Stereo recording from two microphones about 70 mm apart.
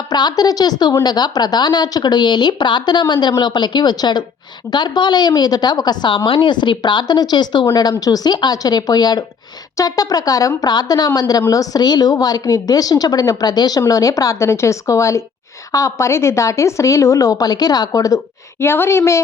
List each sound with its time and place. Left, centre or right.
0.1 s a woman's voice: left
6.5 s a woman's voice: left
9.7 s a woman's voice: left
10.6 s a woman's voice: left
18.6 s a woman's voice: left